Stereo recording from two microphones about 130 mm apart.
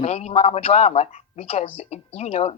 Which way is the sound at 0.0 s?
55° left (ahead or behind).